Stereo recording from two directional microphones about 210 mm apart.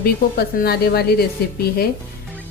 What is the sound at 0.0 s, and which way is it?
Speech, 50° left (ahead or behind).